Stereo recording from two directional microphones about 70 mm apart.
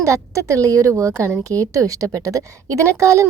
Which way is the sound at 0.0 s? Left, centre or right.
Right.